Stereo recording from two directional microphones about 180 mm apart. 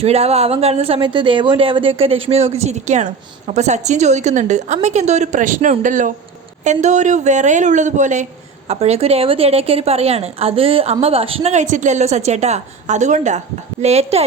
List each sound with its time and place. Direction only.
0.0 s speech: 35° right (ahead or behind)